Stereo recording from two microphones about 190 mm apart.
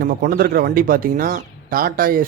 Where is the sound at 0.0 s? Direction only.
50° right (ahead or behind).